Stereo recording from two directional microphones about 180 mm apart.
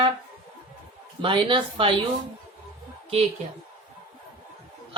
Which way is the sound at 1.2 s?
30° right (ahead or behind).